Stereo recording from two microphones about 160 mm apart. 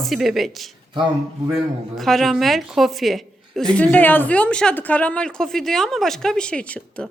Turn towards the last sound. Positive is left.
turn(degrees=5)  # may be behind; listen again after turning